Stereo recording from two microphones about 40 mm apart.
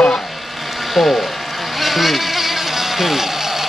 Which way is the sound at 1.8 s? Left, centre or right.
Centre.